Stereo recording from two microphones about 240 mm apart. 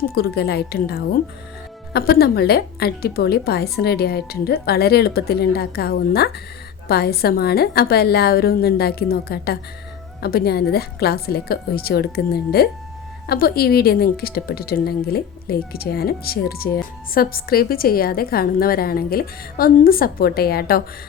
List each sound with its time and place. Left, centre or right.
0.1 s a woman's voice: left